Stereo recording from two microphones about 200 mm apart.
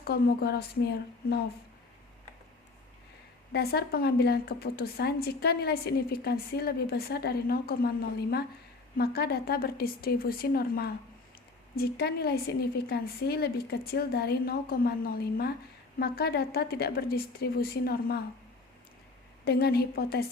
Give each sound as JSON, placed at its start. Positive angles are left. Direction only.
{"t": 0.0, "sound": "a woman's voice", "side_deg": 50}
{"t": 3.5, "sound": "a woman's voice", "side_deg": 50}
{"t": 19.5, "sound": "a woman's voice", "side_deg": 50}